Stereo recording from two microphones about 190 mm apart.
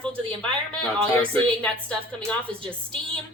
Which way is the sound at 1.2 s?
5° left (ahead or behind).